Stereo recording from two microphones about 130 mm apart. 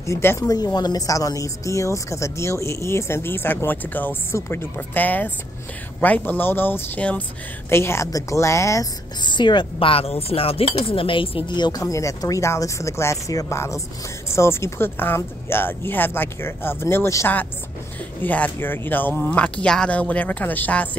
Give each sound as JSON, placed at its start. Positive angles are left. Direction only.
{"t": 0.0, "sound": "a woman's voice", "side_deg": 20}
{"t": 9.2, "sound": "a woman's voice", "side_deg": 35}